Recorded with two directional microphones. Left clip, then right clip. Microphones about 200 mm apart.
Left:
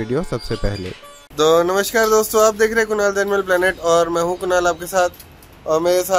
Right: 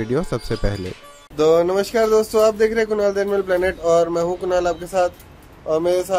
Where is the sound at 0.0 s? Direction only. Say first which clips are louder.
Even; centre (ahead or behind).